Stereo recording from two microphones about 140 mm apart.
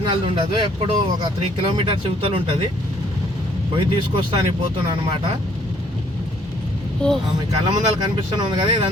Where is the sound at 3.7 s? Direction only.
35° right (ahead or behind).